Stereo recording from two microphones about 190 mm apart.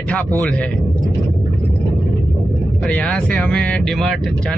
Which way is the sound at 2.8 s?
10° left (ahead or behind).